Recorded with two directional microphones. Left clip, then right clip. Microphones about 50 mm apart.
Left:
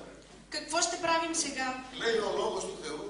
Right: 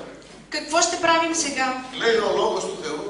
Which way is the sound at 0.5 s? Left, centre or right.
Right.